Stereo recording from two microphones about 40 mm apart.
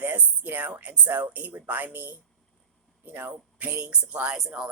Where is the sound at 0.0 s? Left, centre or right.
Right.